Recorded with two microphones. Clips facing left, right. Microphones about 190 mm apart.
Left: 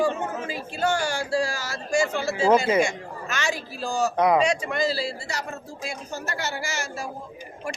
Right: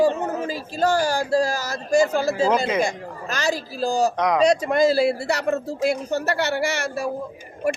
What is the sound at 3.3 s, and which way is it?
Speech, 35° right (ahead or behind).